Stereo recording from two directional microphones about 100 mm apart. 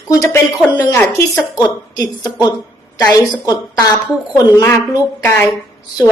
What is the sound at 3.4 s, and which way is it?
Speech, 35° left (ahead or behind).